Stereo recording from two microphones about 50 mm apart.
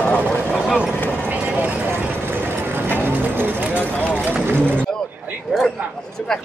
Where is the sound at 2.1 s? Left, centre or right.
Right.